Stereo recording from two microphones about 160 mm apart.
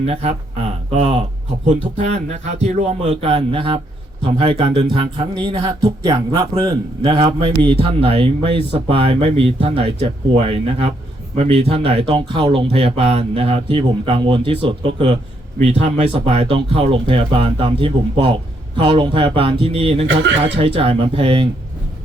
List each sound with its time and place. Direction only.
0.0 s speech: 40° right (ahead or behind)